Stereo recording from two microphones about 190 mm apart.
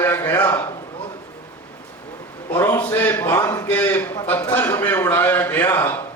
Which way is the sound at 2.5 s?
10° left (ahead or behind).